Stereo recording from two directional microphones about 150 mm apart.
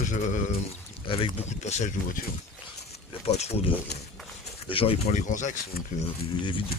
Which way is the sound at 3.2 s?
45° left (ahead or behind).